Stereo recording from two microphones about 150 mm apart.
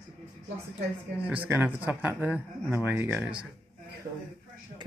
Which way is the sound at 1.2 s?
10° right (ahead or behind).